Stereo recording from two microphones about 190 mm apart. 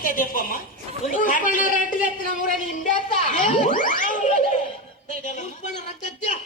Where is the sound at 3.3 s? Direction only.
40° left (ahead or behind).